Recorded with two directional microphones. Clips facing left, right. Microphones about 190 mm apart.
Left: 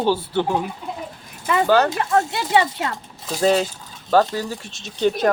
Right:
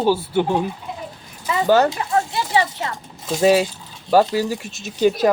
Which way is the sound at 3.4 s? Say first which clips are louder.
Right 3 dB; 10° right (ahead or behind).